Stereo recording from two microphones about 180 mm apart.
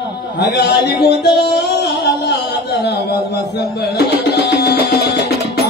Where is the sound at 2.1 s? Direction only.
65° left (ahead or behind).